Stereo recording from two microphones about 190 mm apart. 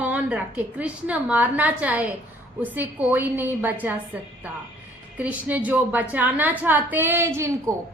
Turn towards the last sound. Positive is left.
turn(degrees=-15)  # may be behind; listen again after turning